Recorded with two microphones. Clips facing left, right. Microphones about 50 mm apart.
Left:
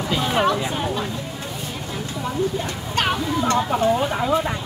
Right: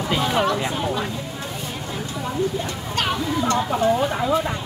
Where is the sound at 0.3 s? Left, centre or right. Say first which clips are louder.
Left 3 dB; centre.